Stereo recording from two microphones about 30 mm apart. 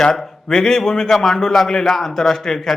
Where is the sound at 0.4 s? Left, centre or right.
Centre.